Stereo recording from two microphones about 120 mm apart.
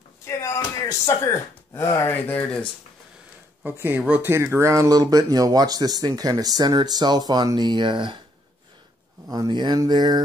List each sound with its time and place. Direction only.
0.4 s speech: 25° left (ahead or behind)
3.6 s speech: 20° right (ahead or behind); by 8.2 s 45° right (ahead or behind)
9.3 s speech: 35° right (ahead or behind)